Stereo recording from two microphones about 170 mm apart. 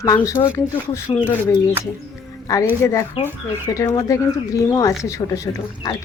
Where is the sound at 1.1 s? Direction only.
30° left (ahead or behind).